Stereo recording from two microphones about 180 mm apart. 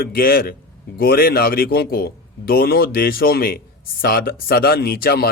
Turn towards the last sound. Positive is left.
turn(degrees=60)  # may be behind; listen again after turning